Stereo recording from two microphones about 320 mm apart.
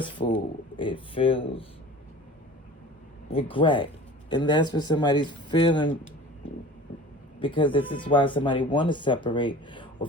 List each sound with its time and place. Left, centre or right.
0.0 s speech: centre
3.3 s speech: centre
7.3 s speech: centre